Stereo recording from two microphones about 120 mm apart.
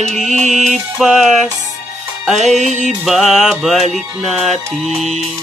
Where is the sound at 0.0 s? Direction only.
80° right.